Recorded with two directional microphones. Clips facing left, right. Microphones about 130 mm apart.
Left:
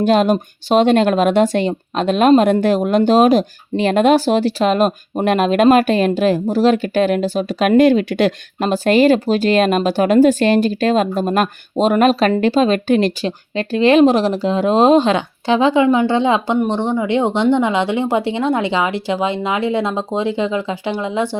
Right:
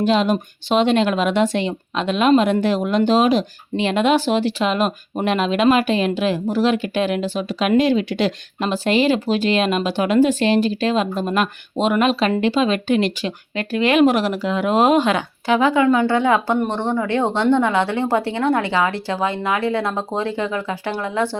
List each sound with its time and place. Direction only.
0.0 s speech: 50° left (ahead or behind); by 21.2 s 15° left (ahead or behind)